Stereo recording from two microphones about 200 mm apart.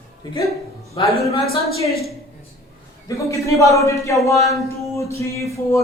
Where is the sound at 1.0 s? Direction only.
25° left (ahead or behind).